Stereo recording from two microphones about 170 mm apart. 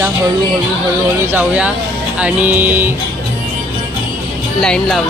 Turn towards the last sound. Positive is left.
turn(degrees=5)  # may be behind; listen again after turning